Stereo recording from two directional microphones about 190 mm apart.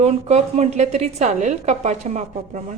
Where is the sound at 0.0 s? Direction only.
35° right (ahead or behind).